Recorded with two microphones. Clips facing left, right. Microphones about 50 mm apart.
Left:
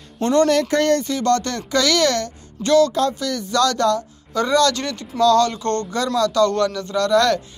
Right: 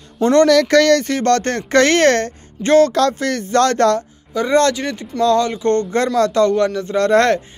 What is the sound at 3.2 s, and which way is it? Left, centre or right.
Speech, right.